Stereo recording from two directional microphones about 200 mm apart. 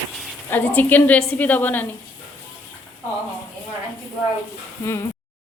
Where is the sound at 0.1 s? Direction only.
Centre (ahead or behind).